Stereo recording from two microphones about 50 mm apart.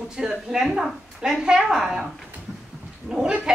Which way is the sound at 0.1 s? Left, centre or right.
Centre.